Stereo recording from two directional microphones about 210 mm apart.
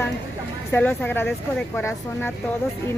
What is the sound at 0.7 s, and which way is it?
A woman's voice, 10° left (ahead or behind).